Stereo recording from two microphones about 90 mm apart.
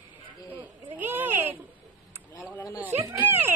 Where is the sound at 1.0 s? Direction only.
20° right (ahead or behind).